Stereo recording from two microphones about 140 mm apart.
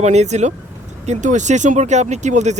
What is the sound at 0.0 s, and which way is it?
Speech, 55° right (ahead or behind).